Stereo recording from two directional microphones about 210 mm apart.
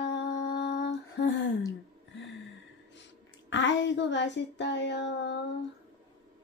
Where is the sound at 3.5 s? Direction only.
60° left (ahead or behind).